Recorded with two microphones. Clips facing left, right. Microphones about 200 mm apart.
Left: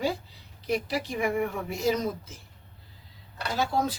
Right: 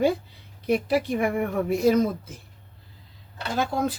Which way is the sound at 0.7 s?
55° right (ahead or behind).